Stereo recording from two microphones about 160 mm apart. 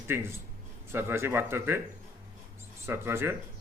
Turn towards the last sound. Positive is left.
turn(degrees=-15)  # may be behind; listen again after turning